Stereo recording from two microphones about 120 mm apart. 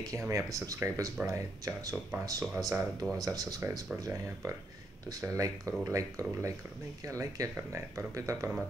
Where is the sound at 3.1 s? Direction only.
30° right (ahead or behind).